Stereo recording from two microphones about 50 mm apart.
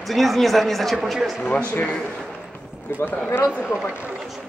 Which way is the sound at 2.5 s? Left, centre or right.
Left.